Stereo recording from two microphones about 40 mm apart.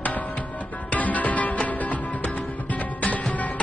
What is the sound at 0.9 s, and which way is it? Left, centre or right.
Music, left.